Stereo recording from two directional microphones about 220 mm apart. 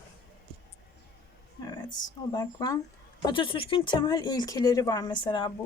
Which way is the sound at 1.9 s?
15° left (ahead or behind).